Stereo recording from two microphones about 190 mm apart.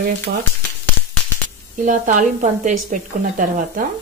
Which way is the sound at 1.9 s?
40° right (ahead or behind).